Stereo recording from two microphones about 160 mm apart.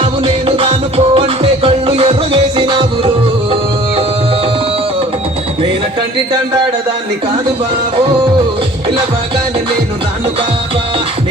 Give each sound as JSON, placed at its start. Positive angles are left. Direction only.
{"t": 0.0, "sound": "music", "side_deg": -35}